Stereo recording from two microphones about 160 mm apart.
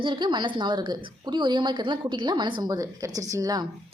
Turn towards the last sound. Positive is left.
turn(degrees=-20)  # may be behind; listen again after turning